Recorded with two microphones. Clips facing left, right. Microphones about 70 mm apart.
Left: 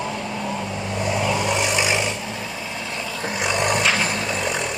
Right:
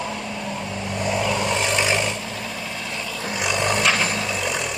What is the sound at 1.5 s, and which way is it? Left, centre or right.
Vehicle, centre.